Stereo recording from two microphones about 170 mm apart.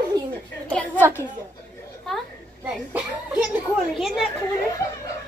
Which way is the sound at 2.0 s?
Centre (ahead or behind).